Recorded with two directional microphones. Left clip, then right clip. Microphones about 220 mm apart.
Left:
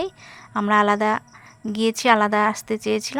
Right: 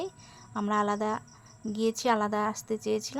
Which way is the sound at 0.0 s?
25° left (ahead or behind).